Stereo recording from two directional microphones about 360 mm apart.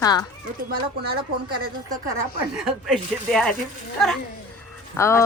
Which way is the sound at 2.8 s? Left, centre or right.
Centre.